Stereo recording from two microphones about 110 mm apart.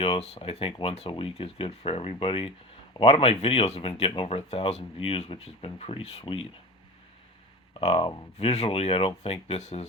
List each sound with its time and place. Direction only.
0.0 s speech: 60° left (ahead or behind)
7.7 s speech: 60° left (ahead or behind)
8.4 s speech: 75° left (ahead or behind)